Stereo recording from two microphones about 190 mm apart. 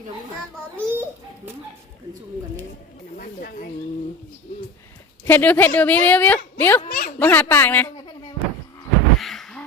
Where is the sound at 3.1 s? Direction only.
50° left (ahead or behind).